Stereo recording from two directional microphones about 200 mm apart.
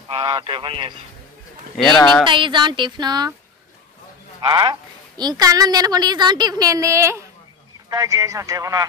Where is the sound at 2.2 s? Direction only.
25° right (ahead or behind).